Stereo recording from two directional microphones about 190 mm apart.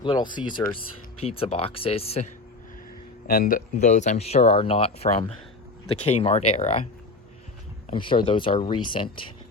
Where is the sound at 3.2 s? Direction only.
50° left (ahead or behind).